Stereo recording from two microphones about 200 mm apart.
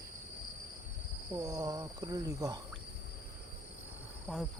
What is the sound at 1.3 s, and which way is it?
Speech, 15° right (ahead or behind).